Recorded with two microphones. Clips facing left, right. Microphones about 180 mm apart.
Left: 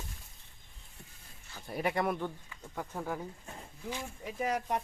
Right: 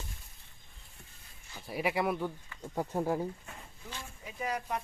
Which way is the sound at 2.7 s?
30° right (ahead or behind).